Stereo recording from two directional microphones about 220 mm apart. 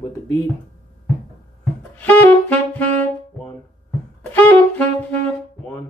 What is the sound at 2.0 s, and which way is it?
Saxophone, 10° left (ahead or behind).